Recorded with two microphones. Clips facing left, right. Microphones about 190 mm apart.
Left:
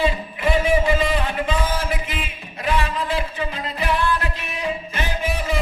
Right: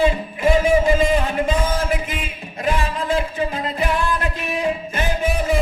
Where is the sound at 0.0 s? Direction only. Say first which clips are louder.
Right 4 dB; 45° right (ahead or behind).